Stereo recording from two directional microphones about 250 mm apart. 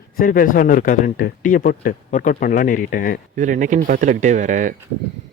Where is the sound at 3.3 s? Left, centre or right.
Right.